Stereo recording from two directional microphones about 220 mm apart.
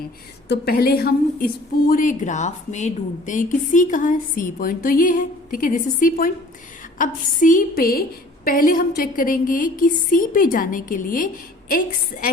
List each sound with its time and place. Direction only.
0.4 s a woman's voice: 45° left (ahead or behind)